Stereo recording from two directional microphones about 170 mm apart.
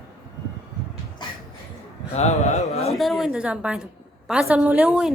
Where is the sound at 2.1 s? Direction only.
40° left (ahead or behind).